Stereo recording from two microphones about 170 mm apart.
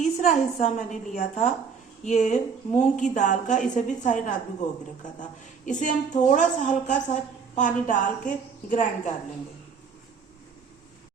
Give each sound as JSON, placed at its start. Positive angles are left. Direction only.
{"t": 0.0, "sound": "a woman's voice", "side_deg": 45}